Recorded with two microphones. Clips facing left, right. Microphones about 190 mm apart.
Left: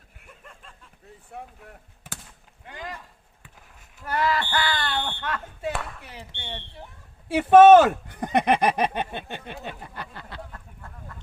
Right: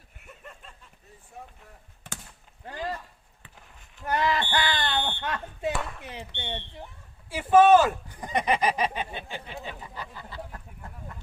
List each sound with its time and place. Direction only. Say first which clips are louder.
0.3 s a sound: right 2 dB; centre (ahead or behind)
1.4 s speech: left 4 dB; 65° left (ahead or behind)
2.6 s speech: right 4 dB; 35° right (ahead or behind)
4.0 s speech: left 1 dB; 20° right (ahead or behind)
7.3 s speech: left 5 dB; 70° left (ahead or behind)